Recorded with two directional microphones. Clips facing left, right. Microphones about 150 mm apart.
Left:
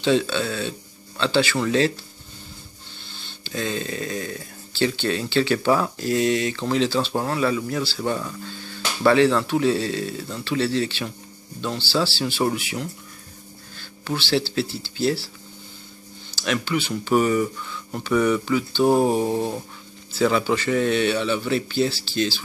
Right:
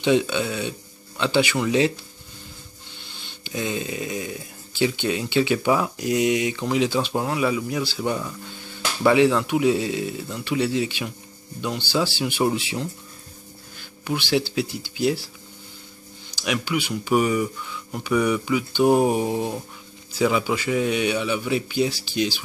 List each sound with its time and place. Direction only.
0.0 s speech: 15° right (ahead or behind)
3.4 s speech: 15° right (ahead or behind)
8.2 s speech: 5° right (ahead or behind)
13.7 s speech: 15° right (ahead or behind)
16.3 s speech: 15° right (ahead or behind)